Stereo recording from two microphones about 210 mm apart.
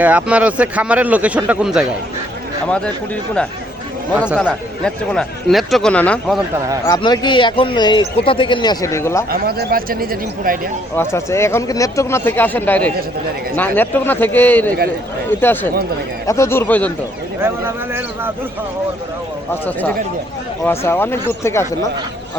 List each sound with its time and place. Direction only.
0.0 s speech: 5° right (ahead or behind)
4.3 s speech: centre (ahead or behind)
6.8 s a man's voice: 20° left (ahead or behind)
9.3 s speech: 50° right (ahead or behind)
10.9 s speech: 10° left (ahead or behind)
17.4 s speech: 10° right (ahead or behind)
20.7 s speech: 10° left (ahead or behind)